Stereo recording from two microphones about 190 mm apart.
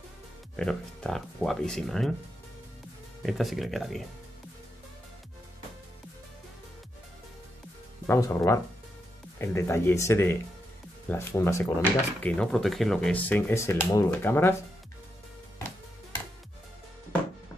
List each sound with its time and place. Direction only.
0.6 s speech: 5° left (ahead or behind)
3.2 s speech: centre (ahead or behind)
8.1 s speech: 15° left (ahead or behind)